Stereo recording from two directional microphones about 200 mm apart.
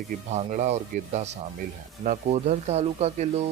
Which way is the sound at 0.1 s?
35° right (ahead or behind).